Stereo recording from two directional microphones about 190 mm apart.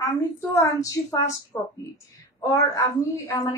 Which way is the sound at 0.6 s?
15° left (ahead or behind).